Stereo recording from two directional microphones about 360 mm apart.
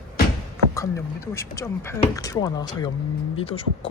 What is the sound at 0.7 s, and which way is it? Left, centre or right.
Speech, centre.